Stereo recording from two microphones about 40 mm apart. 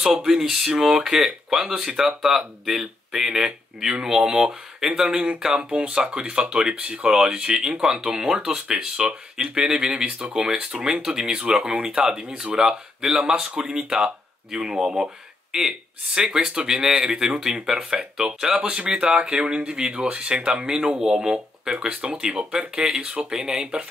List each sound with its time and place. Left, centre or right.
0.2 s speech: centre
5.1 s speech: right; by 18.6 s centre
18.6 s speech: right